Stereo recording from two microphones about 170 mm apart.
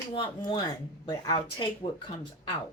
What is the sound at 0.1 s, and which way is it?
Speech, 25° left (ahead or behind).